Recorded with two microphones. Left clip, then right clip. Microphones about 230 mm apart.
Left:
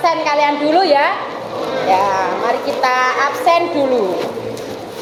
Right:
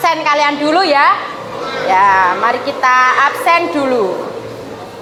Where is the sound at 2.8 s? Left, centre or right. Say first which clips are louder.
Right 6 dB; right.